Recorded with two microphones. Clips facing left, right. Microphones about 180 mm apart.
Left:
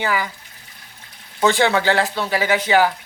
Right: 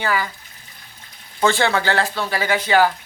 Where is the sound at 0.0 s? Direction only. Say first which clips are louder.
Even; 15° left (ahead or behind).